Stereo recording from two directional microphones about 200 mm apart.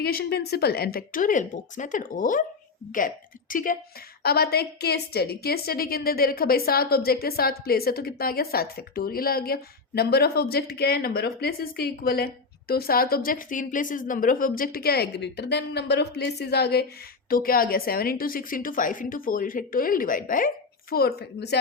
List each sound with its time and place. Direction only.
0.0 s a woman's voice: 50° left (ahead or behind)
3.5 s a woman's voice: 45° left (ahead or behind)